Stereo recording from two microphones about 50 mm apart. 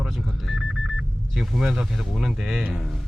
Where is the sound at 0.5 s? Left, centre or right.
Centre.